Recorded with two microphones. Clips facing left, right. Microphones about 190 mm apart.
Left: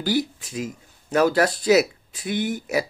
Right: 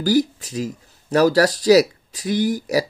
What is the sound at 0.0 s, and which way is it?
Speech, 40° right (ahead or behind).